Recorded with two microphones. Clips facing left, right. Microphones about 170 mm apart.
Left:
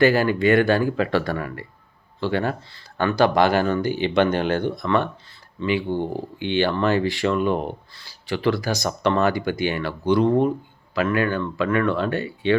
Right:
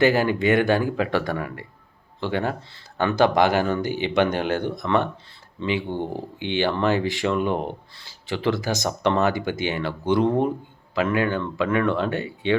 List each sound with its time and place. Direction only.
0.0 s speech: 20° right (ahead or behind)